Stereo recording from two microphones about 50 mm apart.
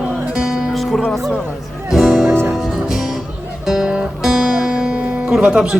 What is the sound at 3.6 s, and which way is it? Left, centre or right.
Guitar, centre.